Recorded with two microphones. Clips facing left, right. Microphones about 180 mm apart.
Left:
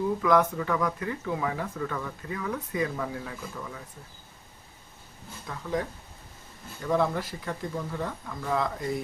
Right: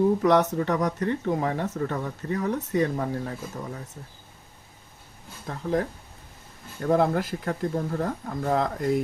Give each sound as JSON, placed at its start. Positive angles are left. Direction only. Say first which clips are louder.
{"t": 0.2, "sound": "speech", "louder": "right 3 dB", "side_deg": -40}
{"t": 5.5, "sound": "speech", "louder": "right 5 dB", "side_deg": -40}
{"t": 6.8, "sound": "speech", "louder": "right 4 dB", "side_deg": -50}